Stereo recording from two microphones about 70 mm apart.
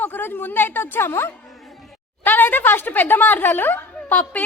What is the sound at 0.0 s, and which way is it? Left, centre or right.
A woman's voice, left.